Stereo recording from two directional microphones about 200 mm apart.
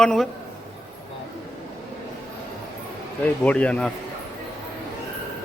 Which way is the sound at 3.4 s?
5° left (ahead or behind).